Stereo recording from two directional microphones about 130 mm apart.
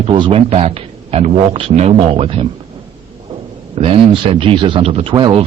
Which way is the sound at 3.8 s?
50° right (ahead or behind).